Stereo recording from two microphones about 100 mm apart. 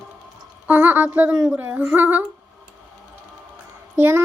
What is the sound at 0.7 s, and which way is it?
A child's voice, 20° right (ahead or behind).